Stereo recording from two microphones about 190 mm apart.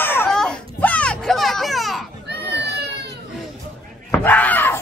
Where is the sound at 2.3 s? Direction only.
60° right (ahead or behind).